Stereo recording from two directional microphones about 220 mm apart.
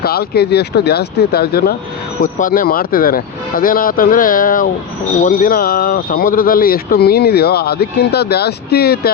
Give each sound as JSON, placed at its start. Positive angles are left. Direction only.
{"t": 0.0, "sound": "speech", "side_deg": 45}